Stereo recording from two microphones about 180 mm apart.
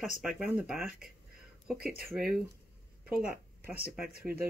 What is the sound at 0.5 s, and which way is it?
Speech, 15° right (ahead or behind).